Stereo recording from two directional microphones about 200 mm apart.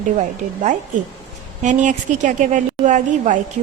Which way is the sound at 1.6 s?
40° right (ahead or behind).